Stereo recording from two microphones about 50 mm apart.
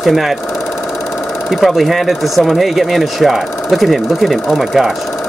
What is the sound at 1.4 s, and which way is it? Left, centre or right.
Speech, centre.